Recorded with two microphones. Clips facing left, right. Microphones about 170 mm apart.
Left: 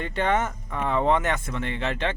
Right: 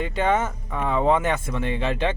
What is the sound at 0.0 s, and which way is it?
Speech, 10° right (ahead or behind).